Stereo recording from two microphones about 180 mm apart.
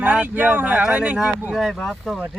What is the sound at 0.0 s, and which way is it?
Speech, 5° right (ahead or behind).